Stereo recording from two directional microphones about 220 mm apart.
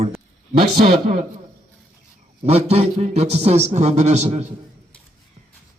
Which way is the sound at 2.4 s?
30° right (ahead or behind).